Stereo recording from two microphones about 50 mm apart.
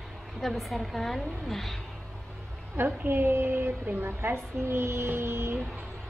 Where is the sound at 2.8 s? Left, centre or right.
Right.